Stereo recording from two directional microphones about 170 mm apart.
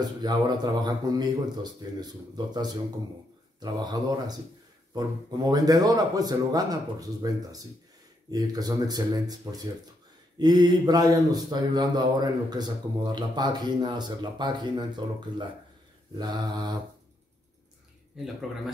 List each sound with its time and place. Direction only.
0.0 s speech: 25° right (ahead or behind)